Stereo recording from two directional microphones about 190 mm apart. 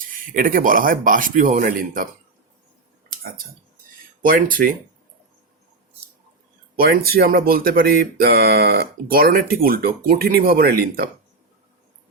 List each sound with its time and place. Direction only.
0.0 s speech: 45° right (ahead or behind)
4.2 s speech: 45° right (ahead or behind)
6.7 s speech: 50° right (ahead or behind)